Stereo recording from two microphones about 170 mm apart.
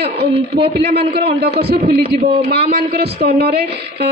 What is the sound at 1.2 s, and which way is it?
Speech, 35° right (ahead or behind).